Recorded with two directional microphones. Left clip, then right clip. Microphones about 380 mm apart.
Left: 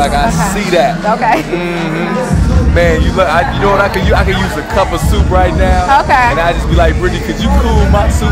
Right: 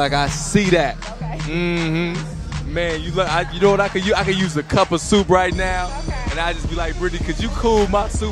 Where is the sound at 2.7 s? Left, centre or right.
Right.